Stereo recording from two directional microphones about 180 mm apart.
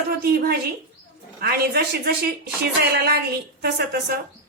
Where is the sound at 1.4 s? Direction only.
65° right (ahead or behind).